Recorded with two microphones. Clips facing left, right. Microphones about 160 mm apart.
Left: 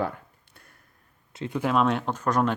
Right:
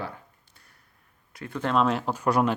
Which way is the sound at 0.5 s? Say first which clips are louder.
Left 5 dB; 55° left (ahead or behind).